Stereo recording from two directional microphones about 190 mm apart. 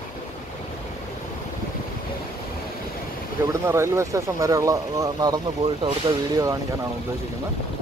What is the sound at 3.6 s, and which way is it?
Speech, 15° right (ahead or behind).